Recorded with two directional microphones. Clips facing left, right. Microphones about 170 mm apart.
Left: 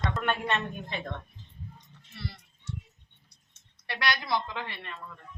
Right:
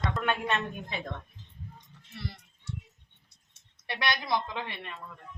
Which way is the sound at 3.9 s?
20° right (ahead or behind).